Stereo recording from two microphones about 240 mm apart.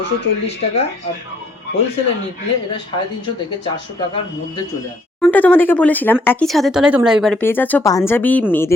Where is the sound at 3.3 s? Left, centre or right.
Left.